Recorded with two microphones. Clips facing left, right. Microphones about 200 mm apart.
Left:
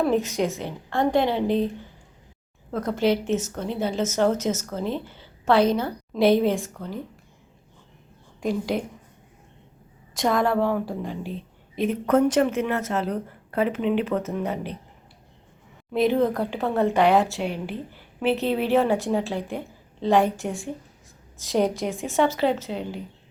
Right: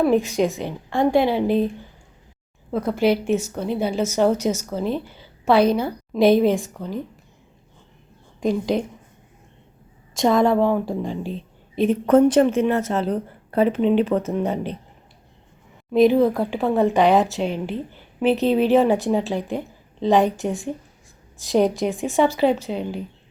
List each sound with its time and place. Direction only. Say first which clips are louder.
0.0 s a woman's voice: right 4 dB; 15° right (ahead or behind)
2.7 s a woman's voice: right 3 dB; 10° right (ahead or behind)
8.4 s a woman's voice: right 4 dB; 20° right (ahead or behind)
10.2 s a woman's voice: right 5 dB; 25° right (ahead or behind)
15.9 s a woman's voice: right 5 dB; 15° right (ahead or behind)